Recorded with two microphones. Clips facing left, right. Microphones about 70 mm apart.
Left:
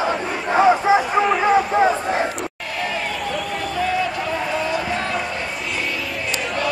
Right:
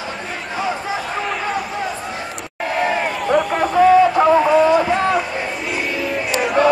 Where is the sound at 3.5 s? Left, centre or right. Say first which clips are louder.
Right 11 dB; right.